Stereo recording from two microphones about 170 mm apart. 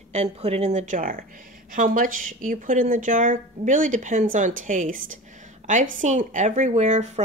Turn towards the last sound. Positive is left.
turn(degrees=-45)  # may be behind; listen again after turning